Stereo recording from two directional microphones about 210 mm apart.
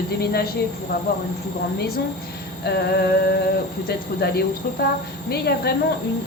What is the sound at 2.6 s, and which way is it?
A woman's voice, 50° left (ahead or behind).